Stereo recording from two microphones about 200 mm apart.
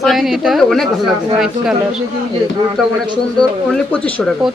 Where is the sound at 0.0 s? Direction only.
Centre (ahead or behind).